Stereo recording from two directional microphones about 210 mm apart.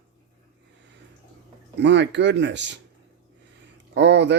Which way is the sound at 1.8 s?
55° right (ahead or behind).